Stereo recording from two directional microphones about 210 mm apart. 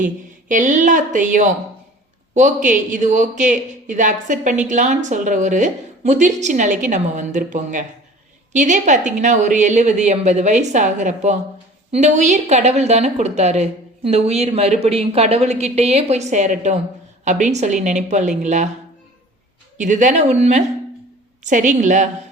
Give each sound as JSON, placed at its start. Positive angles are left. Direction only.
{"t": 0.0, "sound": "a woman's voice", "side_deg": -40}
{"t": 19.8, "sound": "a woman's voice", "side_deg": -35}